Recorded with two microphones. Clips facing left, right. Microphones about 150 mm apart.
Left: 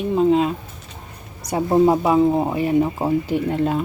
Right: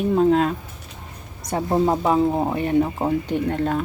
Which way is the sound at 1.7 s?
5° left (ahead or behind).